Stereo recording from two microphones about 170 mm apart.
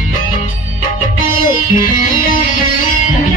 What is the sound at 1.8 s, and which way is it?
Music, 55° left (ahead or behind).